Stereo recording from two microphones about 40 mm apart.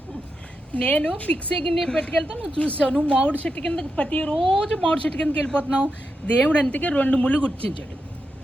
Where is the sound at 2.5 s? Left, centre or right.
Left.